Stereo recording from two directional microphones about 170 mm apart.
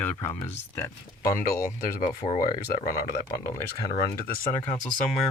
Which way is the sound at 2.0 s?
45° left (ahead or behind).